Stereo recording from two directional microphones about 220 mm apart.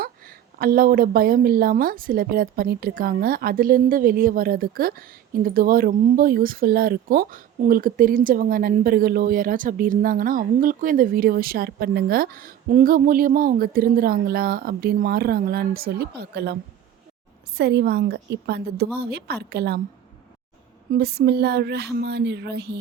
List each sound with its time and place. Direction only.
0.0 s a woman's voice: 40° right (ahead or behind)
20.9 s speech: 45° right (ahead or behind)